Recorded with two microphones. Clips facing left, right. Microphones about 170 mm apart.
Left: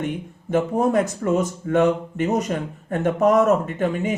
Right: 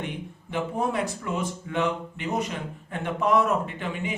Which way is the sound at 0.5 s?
45° left (ahead or behind).